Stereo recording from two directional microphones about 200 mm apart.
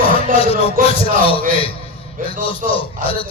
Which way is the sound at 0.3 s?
30° left (ahead or behind).